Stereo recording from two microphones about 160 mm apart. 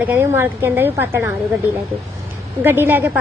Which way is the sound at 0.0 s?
15° right (ahead or behind).